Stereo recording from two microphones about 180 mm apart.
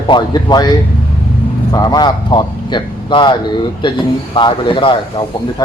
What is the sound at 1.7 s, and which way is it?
A man's voice, 20° left (ahead or behind).